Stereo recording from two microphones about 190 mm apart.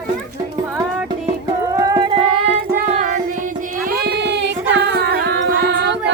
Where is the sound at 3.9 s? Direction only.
60° right (ahead or behind).